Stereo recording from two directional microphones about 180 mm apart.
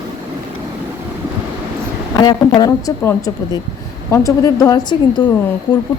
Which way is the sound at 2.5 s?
20° left (ahead or behind).